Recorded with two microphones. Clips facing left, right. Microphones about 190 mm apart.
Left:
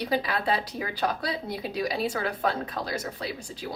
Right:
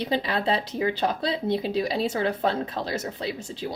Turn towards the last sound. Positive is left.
turn(degrees=-25)  # may be behind; listen again after turning